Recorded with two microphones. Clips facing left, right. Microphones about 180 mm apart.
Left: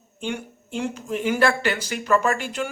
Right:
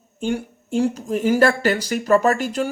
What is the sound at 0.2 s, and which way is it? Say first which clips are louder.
Speech: right 6 dB; 40° right (ahead or behind).